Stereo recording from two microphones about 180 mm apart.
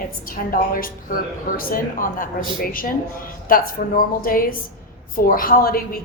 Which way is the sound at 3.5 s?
50° left (ahead or behind).